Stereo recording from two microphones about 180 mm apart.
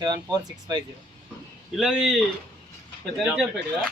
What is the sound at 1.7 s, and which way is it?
Speech, centre (ahead or behind).